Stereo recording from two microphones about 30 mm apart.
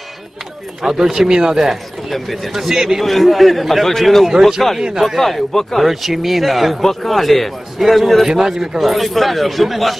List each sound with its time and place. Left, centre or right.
0.8 s speech: centre
1.6 s speech: centre
3.0 s a man's voice: centre
4.3 s speech: centre
5.2 s a man's voice: centre
5.8 s a man's voice: centre
6.8 s a man's voice: centre
8.3 s speech: centre
8.8 s a man's voice: centre